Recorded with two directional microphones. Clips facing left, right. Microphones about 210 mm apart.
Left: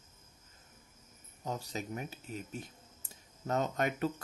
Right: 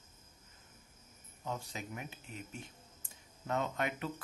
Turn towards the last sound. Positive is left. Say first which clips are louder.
# left 4 dB
turn(degrees=40)  # may be behind; listen again after turning